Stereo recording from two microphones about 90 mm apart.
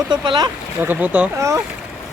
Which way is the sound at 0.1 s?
55° right (ahead or behind).